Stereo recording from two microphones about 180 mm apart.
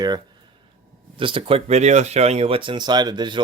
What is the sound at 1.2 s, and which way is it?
Speech, 30° right (ahead or behind).